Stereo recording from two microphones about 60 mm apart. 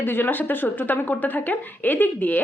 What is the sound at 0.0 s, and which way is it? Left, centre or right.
A woman's voice, left.